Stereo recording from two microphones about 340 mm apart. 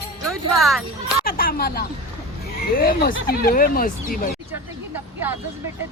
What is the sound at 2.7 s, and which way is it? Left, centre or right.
Speech, left.